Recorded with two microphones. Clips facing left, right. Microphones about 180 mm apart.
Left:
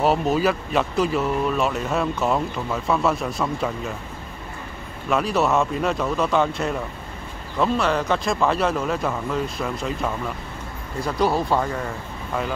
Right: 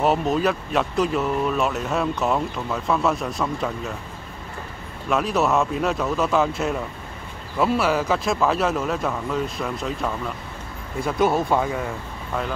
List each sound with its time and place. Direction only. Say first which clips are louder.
0.0 s speech: left 1 dB; centre (ahead or behind)
5.1 s speech: even; centre (ahead or behind)
11.1 s speech: right 1 dB; 20° right (ahead or behind)
11.4 s speech: right 1 dB; centre (ahead or behind)